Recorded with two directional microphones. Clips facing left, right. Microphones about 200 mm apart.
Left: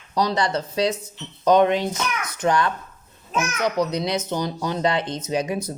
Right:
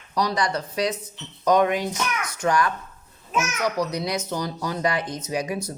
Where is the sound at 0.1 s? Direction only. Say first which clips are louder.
Left 2 dB; 25° left (ahead or behind).